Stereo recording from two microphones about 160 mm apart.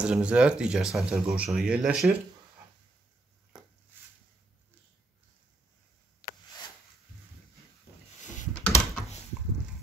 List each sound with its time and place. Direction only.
0.0 s speech: 5° right (ahead or behind)
8.2 s a sound: 50° left (ahead or behind)
8.5 s typing: 10° left (ahead or behind)